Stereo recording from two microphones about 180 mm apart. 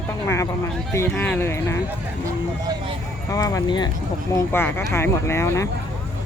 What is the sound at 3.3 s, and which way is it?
Speech, 20° left (ahead or behind).